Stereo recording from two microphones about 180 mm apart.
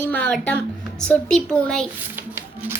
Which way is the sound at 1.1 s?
5° left (ahead or behind).